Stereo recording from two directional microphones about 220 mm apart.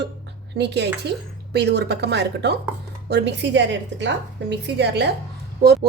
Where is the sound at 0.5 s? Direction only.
50° right (ahead or behind).